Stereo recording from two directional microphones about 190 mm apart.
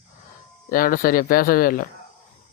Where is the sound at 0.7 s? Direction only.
45° left (ahead or behind).